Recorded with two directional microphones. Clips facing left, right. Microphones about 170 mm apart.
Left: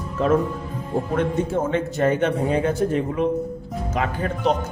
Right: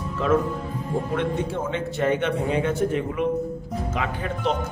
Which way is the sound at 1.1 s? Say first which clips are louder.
Left 6 dB; 40° left (ahead or behind).